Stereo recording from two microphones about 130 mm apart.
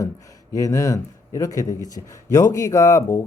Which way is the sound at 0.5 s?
25° left (ahead or behind).